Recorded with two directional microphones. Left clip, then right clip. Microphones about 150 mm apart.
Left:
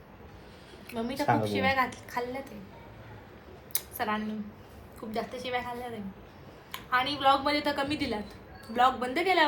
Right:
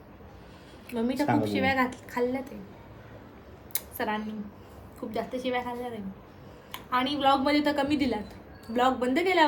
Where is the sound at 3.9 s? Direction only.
25° right (ahead or behind).